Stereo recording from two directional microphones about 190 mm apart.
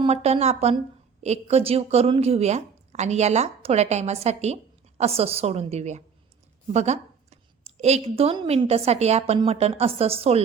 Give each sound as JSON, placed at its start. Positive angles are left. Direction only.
{"t": 0.0, "sound": "a woman's voice", "side_deg": -35}